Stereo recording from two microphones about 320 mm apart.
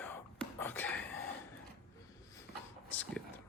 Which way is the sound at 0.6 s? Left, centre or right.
Centre.